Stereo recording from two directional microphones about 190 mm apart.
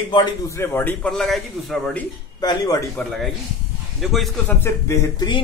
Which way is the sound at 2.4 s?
20° left (ahead or behind).